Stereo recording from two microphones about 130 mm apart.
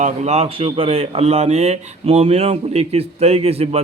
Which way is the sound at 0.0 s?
55° right (ahead or behind).